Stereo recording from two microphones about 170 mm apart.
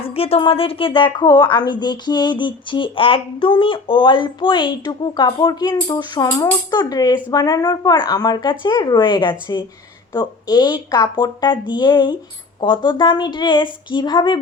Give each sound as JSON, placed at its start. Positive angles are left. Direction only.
{"t": 0.0, "sound": "a woman's voice", "side_deg": 35}